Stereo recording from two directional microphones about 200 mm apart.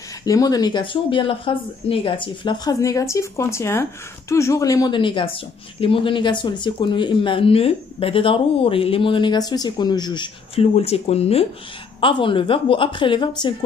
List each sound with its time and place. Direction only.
0.2 s speech: 20° left (ahead or behind)